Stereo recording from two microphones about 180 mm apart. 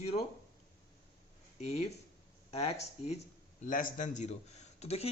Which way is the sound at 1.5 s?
35° left (ahead or behind).